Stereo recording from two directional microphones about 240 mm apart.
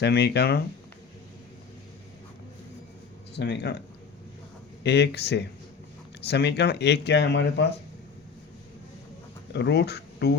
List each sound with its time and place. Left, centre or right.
0.0 s speech: left
3.3 s speech: left
4.8 s speech: left
9.5 s speech: left